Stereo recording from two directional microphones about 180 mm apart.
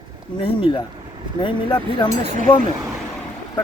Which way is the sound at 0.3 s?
30° left (ahead or behind).